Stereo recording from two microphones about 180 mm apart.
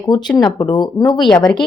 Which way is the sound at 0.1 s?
25° left (ahead or behind).